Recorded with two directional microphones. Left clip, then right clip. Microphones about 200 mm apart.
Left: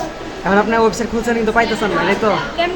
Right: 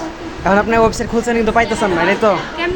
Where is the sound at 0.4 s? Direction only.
15° right (ahead or behind).